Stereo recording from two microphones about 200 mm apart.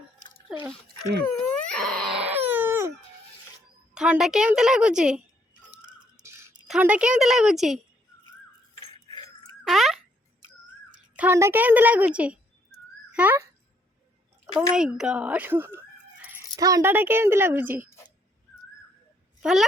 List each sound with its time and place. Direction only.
0.5 s speech: centre (ahead or behind)
1.5 s wail: 5° left (ahead or behind)
2.2 s crying: 10° right (ahead or behind)
3.9 s speech: 5° right (ahead or behind)
5.8 s music: 20° right (ahead or behind)
6.7 s speech: 5° right (ahead or behind)
9.6 s a sound: centre (ahead or behind)
11.2 s whistling: 10° right (ahead or behind)
14.4 s speech: 5° right (ahead or behind)
19.4 s speech: 5° right (ahead or behind)